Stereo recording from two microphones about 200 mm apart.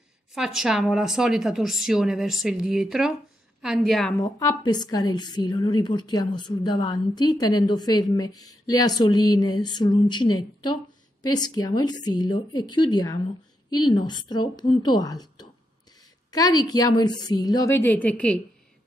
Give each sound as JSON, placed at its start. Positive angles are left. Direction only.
{"t": 0.3, "sound": "speech", "side_deg": 0}
{"t": 4.2, "sound": "a woman's voice", "side_deg": 15}